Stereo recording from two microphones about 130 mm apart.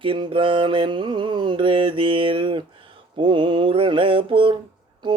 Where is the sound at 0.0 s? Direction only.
40° right (ahead or behind).